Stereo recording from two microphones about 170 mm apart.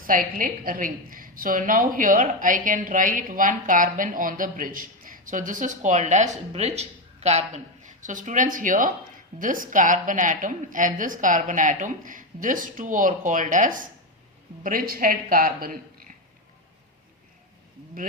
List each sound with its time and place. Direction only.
0.1 s a woman's voice: 55° right (ahead or behind)